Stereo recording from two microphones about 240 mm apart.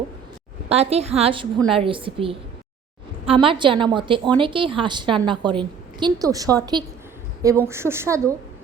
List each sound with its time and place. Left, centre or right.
0.7 s a woman's voice: right